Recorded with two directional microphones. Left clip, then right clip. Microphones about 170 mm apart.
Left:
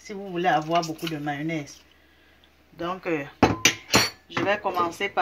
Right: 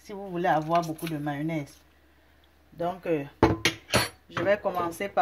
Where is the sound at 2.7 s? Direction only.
55° right (ahead or behind).